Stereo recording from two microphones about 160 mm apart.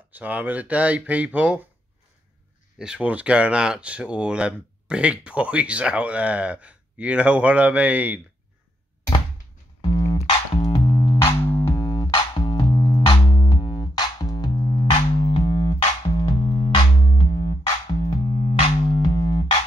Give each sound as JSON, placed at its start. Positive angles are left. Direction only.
{"t": 0.1, "sound": "speech", "side_deg": -10}
{"t": 2.8, "sound": "speech", "side_deg": -5}
{"t": 10.1, "sound": "music", "side_deg": 35}
{"t": 13.3, "sound": "music", "side_deg": 20}
{"t": 13.6, "sound": "music", "side_deg": 30}